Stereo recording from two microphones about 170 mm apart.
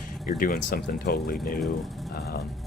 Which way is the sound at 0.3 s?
55° left (ahead or behind).